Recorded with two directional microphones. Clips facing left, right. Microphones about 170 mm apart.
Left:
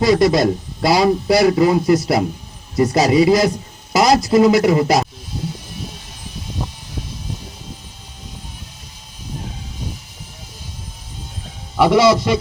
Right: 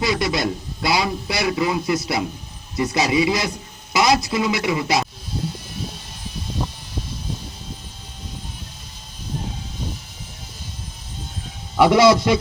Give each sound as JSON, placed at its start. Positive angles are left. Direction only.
{"t": 0.0, "sound": "a man's voice", "side_deg": 40}
{"t": 11.8, "sound": "a man's voice", "side_deg": 0}